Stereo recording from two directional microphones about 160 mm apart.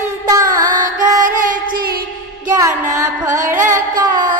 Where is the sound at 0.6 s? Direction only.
55° right (ahead or behind).